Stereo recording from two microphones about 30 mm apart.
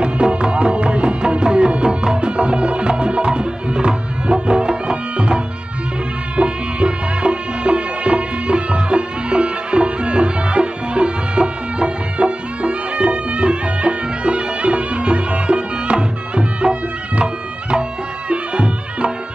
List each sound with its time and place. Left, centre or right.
0.0 s music: right